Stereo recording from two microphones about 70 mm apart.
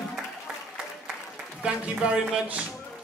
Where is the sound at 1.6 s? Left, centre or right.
Centre.